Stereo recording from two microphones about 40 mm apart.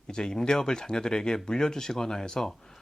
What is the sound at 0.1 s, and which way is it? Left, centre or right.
Speech, centre.